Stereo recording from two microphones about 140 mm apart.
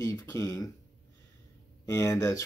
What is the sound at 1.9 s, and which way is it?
Speech, 20° left (ahead or behind).